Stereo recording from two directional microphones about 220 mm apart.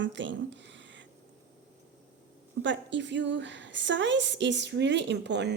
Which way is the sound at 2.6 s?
55° right (ahead or behind).